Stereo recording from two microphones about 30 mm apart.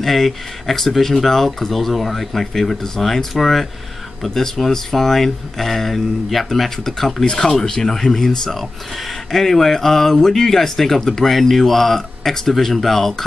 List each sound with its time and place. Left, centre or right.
0.0 s speech: centre
6.8 s speech: centre
7.2 s speech: left; by 13.1 s centre